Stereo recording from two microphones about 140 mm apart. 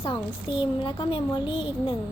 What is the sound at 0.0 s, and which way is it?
A woman's voice, 35° left (ahead or behind).